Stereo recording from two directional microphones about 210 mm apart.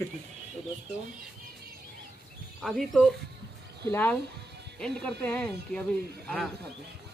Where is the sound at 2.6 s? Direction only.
Centre (ahead or behind).